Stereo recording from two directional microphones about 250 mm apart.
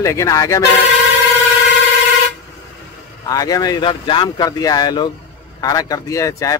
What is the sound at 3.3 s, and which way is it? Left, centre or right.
Speech, centre.